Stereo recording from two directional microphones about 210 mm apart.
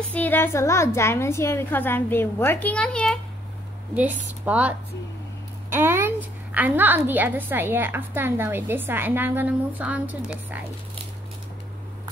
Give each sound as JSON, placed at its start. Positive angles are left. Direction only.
{"t": 0.1, "sound": "a woman's voice", "side_deg": 10}
{"t": 3.9, "sound": "a woman's voice", "side_deg": -5}